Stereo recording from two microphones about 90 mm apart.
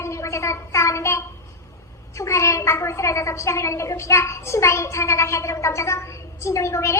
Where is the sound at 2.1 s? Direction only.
35° left (ahead or behind).